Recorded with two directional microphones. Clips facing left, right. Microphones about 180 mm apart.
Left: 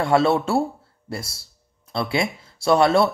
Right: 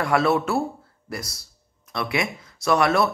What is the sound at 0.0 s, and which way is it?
Speech, 25° left (ahead or behind).